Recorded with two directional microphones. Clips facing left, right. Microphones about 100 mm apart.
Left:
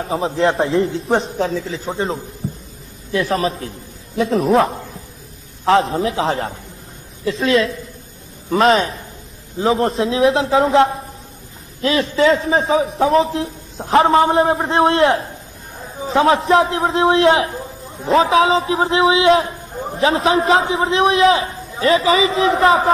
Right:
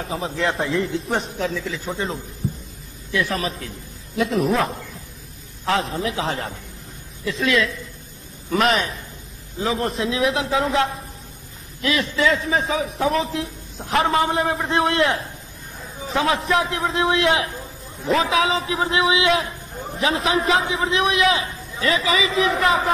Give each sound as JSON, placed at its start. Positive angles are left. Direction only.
{"t": 0.0, "sound": "a man's voice", "side_deg": 30}